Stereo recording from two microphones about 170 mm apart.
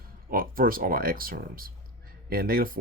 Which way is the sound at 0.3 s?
55° right (ahead or behind).